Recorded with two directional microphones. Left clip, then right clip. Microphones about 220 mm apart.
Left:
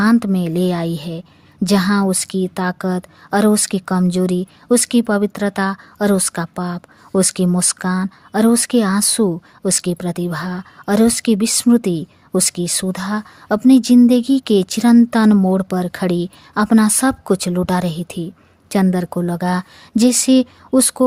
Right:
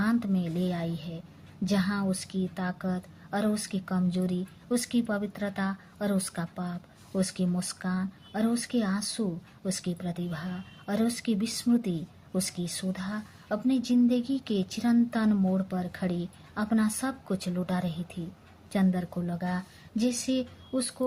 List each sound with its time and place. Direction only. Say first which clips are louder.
0.0 s a woman's voice: left 13 dB; 50° left (ahead or behind)